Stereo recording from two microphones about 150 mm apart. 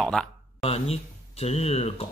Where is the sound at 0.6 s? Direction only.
40° left (ahead or behind).